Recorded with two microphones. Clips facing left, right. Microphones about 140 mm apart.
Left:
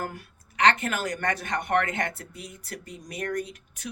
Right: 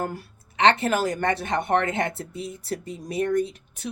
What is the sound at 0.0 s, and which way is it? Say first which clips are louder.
A woman's voice: right 5 dB; 30° right (ahead or behind).